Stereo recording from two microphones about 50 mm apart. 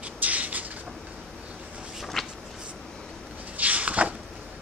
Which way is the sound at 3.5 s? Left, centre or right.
Right.